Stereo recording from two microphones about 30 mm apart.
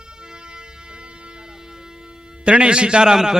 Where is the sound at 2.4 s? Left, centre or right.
Right.